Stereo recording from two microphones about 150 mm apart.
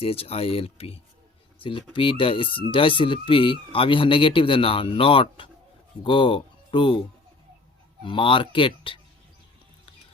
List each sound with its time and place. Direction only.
0.0 s speech: 40° left (ahead or behind)
8.0 s speech: 35° left (ahead or behind)